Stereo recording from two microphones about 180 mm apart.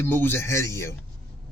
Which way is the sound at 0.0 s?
10° left (ahead or behind).